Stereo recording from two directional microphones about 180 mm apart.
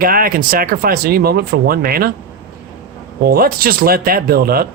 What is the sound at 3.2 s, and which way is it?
Speech, 55° right (ahead or behind).